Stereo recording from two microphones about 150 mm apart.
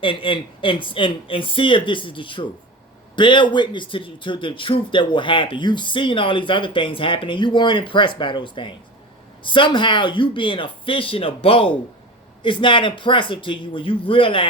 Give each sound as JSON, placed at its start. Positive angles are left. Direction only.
{"t": 0.0, "sound": "speech", "side_deg": 35}